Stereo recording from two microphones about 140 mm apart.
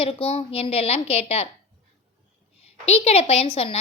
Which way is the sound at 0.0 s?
45° left (ahead or behind).